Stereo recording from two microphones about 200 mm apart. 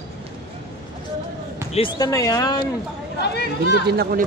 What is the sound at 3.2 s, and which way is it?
Speech, 55° left (ahead or behind).